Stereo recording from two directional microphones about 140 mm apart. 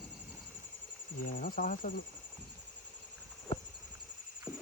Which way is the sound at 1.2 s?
80° left.